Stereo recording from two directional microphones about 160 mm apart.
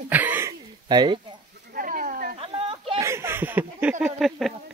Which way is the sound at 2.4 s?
35° right (ahead or behind).